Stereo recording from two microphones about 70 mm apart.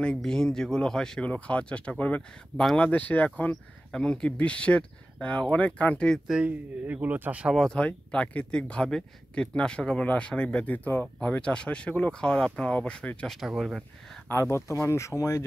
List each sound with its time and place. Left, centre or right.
0.2 s speech: centre
3.9 s speech: centre
6.2 s speech: centre
6.9 s speech: right
7.5 s speech: centre
13.6 s speech: centre
14.3 s speech: left